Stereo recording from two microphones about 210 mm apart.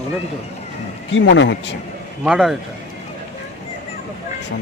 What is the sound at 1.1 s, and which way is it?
Speech, 65° left (ahead or behind).